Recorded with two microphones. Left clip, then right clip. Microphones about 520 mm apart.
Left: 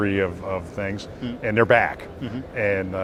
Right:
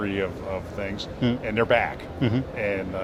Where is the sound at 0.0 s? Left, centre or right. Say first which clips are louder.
Left 4 dB; left.